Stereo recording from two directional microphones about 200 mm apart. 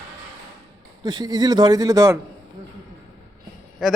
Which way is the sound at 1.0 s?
20° right (ahead or behind).